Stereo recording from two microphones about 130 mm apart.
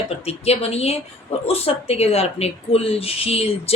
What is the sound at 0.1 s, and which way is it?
Speech, 50° left (ahead or behind).